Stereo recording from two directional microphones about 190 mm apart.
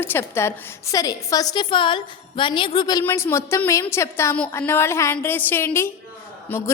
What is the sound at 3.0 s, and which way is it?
A woman's voice, 10° left (ahead or behind).